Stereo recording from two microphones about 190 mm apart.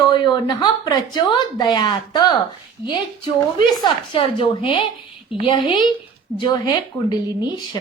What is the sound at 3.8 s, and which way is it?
Speech, 25° left (ahead or behind).